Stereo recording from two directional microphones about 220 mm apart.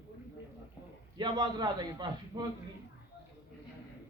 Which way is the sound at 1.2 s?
20° right (ahead or behind).